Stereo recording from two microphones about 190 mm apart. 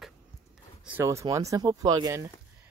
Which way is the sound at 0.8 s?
10° right (ahead or behind).